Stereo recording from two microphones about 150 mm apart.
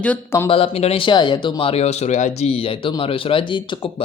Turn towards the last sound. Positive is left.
turn(degrees=30)  # may be behind; listen again after turning